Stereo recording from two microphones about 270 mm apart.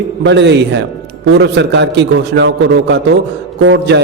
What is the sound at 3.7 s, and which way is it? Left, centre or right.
Mantra, right.